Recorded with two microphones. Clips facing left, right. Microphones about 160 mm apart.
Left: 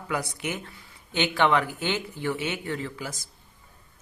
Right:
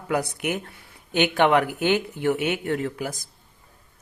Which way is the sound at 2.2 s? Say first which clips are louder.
Right 5 dB; 60° right (ahead or behind).